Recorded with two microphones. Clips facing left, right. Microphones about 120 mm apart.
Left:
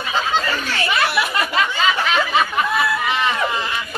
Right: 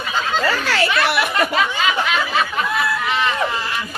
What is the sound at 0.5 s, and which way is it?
Chatter, 90° right.